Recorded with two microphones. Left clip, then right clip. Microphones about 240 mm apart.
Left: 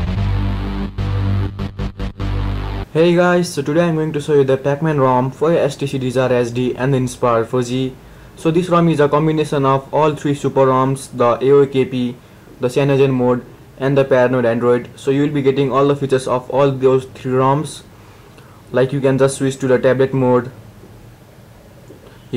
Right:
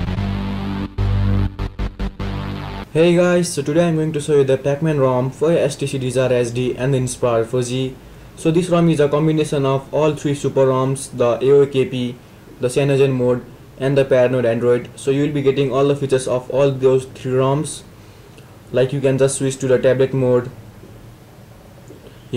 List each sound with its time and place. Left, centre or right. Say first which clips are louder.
0.1 s music: even; centre
4.5 s speech: left 1 dB; centre